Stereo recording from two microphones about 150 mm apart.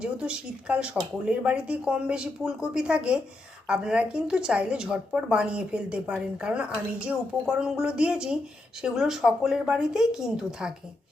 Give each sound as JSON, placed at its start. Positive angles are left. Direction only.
{"t": 0.0, "sound": "a woman's voice", "side_deg": -10}